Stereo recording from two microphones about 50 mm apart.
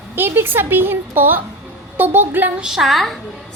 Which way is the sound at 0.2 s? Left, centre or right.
Right.